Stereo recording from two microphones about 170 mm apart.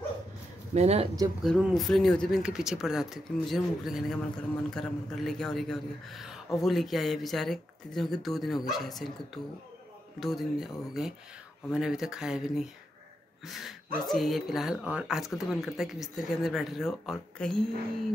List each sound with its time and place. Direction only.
0.7 s speech: 40° right (ahead or behind)
1.4 s speech: centre (ahead or behind)